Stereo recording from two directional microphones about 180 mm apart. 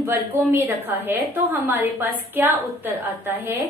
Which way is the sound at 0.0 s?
10° right (ahead or behind).